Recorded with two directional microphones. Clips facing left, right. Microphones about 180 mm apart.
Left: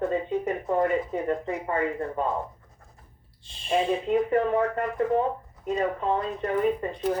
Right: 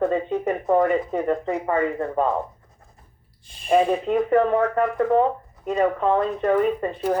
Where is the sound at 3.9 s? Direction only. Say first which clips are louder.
Right 3 dB; 80° right.